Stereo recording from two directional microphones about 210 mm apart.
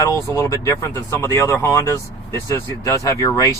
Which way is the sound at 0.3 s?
15° left (ahead or behind).